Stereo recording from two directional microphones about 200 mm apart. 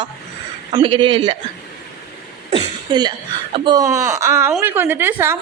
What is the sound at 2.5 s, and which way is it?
A woman's voice, 20° right (ahead or behind).